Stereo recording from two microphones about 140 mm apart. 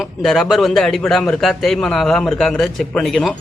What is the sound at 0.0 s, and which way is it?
A man's voice, centre (ahead or behind).